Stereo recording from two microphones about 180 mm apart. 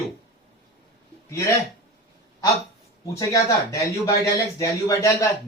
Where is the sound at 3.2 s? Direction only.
20° left (ahead or behind).